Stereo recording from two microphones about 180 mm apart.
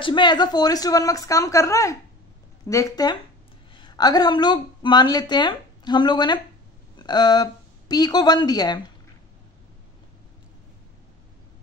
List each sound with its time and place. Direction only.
0.0 s a woman's voice: 25° left (ahead or behind)